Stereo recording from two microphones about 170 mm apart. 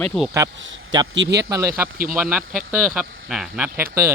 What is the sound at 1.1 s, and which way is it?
Speech, 85° right.